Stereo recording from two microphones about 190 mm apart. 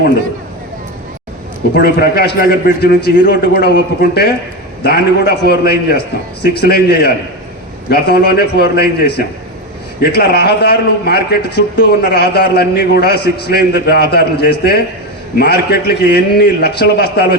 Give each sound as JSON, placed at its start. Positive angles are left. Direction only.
{"t": 1.7, "sound": "a man's voice", "side_deg": 55}
{"t": 5.5, "sound": "a man's voice", "side_deg": 55}